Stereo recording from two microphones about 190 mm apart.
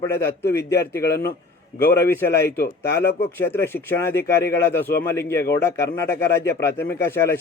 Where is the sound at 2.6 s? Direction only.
55° left (ahead or behind).